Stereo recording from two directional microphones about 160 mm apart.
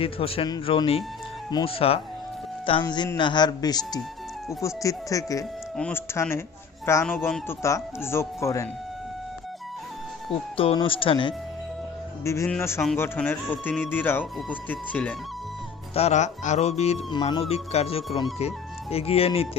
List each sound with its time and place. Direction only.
0.0 s speech: 35° left (ahead or behind)
1.5 s speech: 25° left (ahead or behind)
5.7 s speech: 5° left (ahead or behind)
10.6 s speech: 35° left (ahead or behind)
12.2 s speech: 15° left (ahead or behind)
16.0 s speech: 45° left (ahead or behind)
17.1 s speech: 30° left (ahead or behind)
17.5 s speech: 40° left (ahead or behind)